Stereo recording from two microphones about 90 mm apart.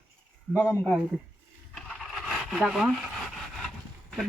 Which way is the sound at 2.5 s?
Centre (ahead or behind).